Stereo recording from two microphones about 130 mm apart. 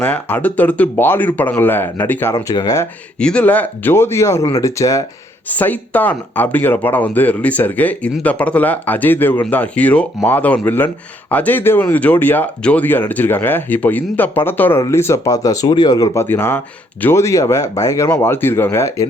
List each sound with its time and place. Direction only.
0.0 s speech: 15° left (ahead or behind)
2.3 s speech: 30° left (ahead or behind)
3.2 s speech: 10° left (ahead or behind); by 5.0 s 25° left (ahead or behind)
5.5 s speech: 10° left (ahead or behind); by 16.2 s 30° left (ahead or behind)
16.2 s speech: 15° left (ahead or behind)